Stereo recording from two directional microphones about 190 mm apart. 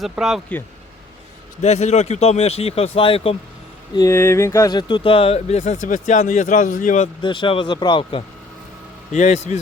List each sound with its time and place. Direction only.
0.0 s speech: centre (ahead or behind)
1.6 s speech: 35° left (ahead or behind)
3.9 s speech: 15° left (ahead or behind); by 7.1 s 40° left (ahead or behind)
7.2 s speech: 25° left (ahead or behind)
9.1 s speech: 35° left (ahead or behind)